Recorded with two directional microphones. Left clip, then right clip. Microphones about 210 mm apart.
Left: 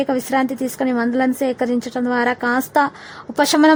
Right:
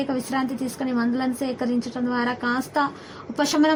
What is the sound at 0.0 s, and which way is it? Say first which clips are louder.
A woman's voice: left 7 dB; 30° left (ahead or behind).